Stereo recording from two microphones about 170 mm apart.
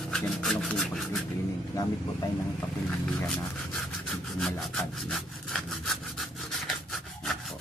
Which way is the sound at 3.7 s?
Centre (ahead or behind).